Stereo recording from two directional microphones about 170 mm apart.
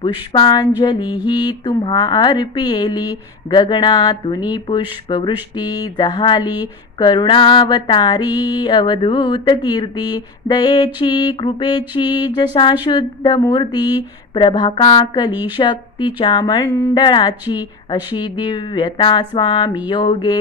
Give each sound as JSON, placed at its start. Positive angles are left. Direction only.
{"t": 0.0, "sound": "mantra", "side_deg": 25}
{"t": 16.7, "sound": "speech", "side_deg": 15}
{"t": 17.0, "sound": "mantra", "side_deg": 25}